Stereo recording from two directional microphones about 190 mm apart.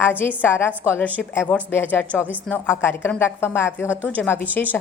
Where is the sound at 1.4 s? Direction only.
5° right (ahead or behind).